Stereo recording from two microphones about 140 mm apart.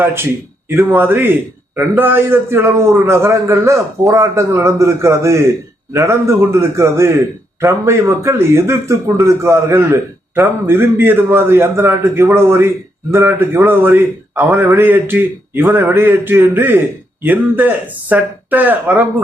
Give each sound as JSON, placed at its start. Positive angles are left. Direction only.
{"t": 0.0, "sound": "a man's voice", "side_deg": -15}